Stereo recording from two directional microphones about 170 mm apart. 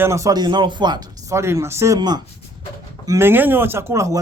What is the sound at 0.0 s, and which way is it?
Speech, 15° right (ahead or behind).